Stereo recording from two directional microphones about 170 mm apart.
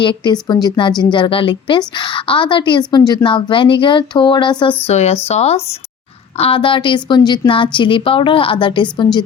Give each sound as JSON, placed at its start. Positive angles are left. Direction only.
{"t": 0.0, "sound": "a woman's voice", "side_deg": 25}
{"t": 4.9, "sound": "a woman's voice", "side_deg": 40}